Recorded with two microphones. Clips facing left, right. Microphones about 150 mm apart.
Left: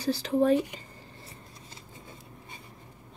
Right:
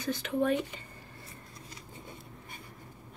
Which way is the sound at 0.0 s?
35° left (ahead or behind).